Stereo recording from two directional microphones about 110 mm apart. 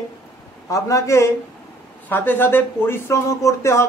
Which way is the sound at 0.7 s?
30° left (ahead or behind).